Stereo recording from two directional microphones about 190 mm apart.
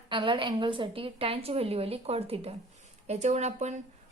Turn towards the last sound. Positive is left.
turn(degrees=-35)  # may be behind; listen again after turning